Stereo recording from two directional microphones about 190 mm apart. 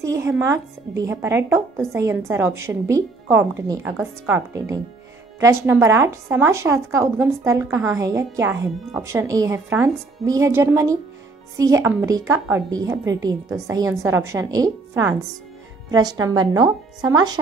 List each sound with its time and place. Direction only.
0.0 s a woman's voice: 15° right (ahead or behind)